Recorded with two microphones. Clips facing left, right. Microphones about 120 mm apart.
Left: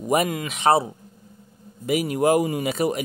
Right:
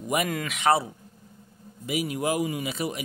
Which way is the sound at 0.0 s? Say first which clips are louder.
Left 6 dB; 35° left (ahead or behind).